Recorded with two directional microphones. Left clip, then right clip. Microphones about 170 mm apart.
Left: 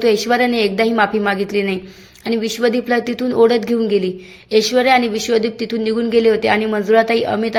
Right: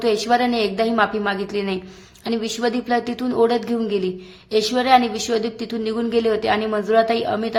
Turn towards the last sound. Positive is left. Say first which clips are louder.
# left 4 dB
turn(degrees=15)  # may be behind; listen again after turning